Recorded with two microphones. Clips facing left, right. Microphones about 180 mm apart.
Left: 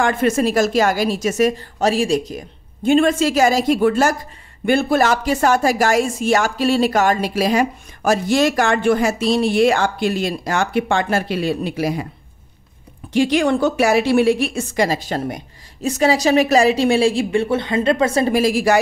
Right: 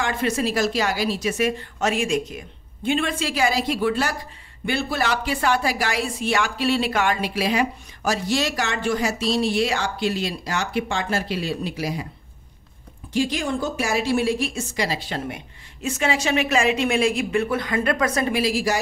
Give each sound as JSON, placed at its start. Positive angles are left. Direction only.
{"t": 0.0, "sound": "speech", "side_deg": 50}
{"t": 13.1, "sound": "a woman's voice", "side_deg": 70}
{"t": 18.3, "sound": "speech", "side_deg": 50}